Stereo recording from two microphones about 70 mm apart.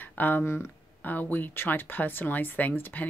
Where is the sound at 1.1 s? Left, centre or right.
Left.